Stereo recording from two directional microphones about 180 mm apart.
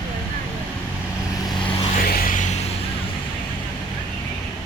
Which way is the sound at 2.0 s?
55° left (ahead or behind).